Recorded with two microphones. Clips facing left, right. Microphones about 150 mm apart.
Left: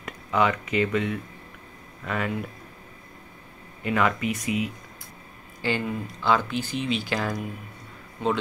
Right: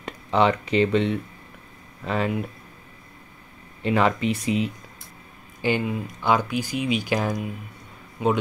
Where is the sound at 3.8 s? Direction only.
30° right (ahead or behind).